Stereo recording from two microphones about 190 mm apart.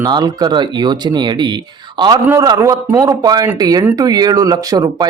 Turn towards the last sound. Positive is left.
turn(degrees=-20)  # may be behind; listen again after turning